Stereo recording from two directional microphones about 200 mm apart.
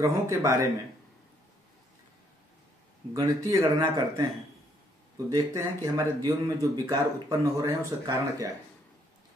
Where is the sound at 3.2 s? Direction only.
15° right (ahead or behind).